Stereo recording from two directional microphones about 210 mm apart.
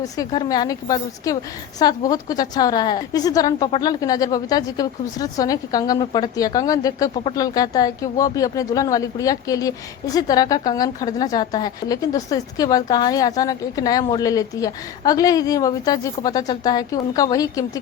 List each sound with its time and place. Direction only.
0.0 s a woman's voice: 15° left (ahead or behind)